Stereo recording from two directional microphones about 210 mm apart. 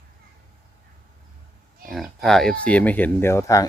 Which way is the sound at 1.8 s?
Centre (ahead or behind).